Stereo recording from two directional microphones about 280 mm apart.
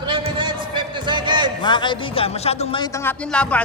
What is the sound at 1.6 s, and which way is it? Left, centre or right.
Speech, centre.